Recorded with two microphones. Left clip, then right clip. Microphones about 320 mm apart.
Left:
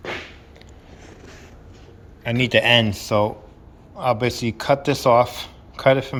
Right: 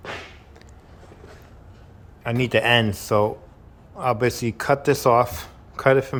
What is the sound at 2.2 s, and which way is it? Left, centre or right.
Speech, centre.